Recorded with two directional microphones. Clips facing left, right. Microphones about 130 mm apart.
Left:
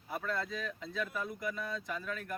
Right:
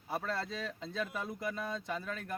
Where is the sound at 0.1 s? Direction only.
30° right (ahead or behind).